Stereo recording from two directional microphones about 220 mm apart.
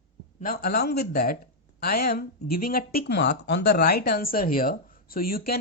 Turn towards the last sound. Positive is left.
turn(degrees=45)  # may be behind; listen again after turning